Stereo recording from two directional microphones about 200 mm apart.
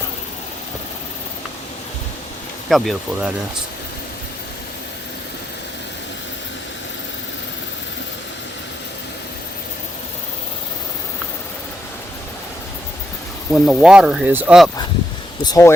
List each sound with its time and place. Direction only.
2.6 s speech: centre (ahead or behind)
13.5 s speech: 5° right (ahead or behind)
15.4 s speech: 15° left (ahead or behind)